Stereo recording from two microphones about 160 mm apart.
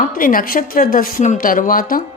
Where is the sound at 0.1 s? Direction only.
60° left (ahead or behind).